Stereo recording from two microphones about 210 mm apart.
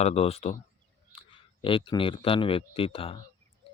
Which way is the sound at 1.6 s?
25° left (ahead or behind).